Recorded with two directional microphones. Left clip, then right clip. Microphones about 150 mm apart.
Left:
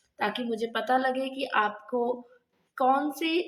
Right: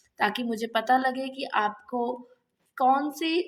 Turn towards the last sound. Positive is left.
turn(degrees=-30)  # may be behind; listen again after turning